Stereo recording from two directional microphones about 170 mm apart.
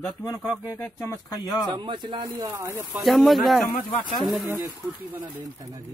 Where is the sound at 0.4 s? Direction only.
Centre (ahead or behind).